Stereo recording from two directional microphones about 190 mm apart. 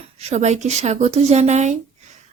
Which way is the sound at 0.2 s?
35° right (ahead or behind).